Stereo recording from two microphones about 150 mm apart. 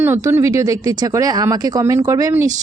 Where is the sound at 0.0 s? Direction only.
15° right (ahead or behind).